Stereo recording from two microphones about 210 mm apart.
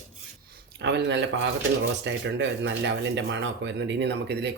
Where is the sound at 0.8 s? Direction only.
55° right (ahead or behind).